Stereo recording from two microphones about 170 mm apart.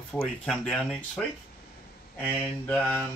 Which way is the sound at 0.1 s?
10° left (ahead or behind).